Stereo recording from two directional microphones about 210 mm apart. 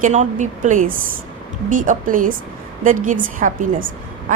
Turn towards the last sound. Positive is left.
turn(degrees=-40)  # may be behind; listen again after turning